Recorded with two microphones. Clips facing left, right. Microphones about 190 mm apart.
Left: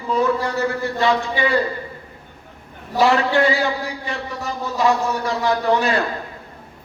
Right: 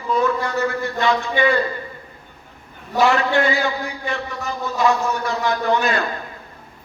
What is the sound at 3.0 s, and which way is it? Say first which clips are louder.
A man's voice: left 1 dB; 35° left (ahead or behind).